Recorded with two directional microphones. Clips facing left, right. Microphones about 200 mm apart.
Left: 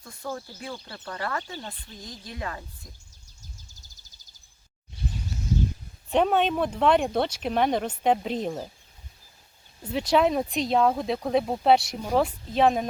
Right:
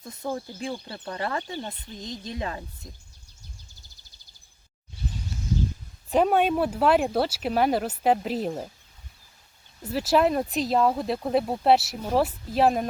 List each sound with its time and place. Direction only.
0.0 s speech: 20° right (ahead or behind)
6.1 s speech: 5° right (ahead or behind)
9.9 s speech: 5° right (ahead or behind)